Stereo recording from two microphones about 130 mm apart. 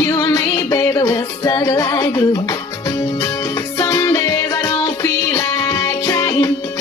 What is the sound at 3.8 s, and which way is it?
Music, 25° left (ahead or behind).